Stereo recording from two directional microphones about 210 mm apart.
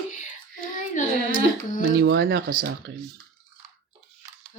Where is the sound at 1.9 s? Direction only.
55° right (ahead or behind).